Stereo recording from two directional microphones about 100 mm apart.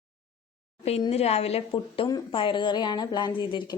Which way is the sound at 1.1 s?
90° left.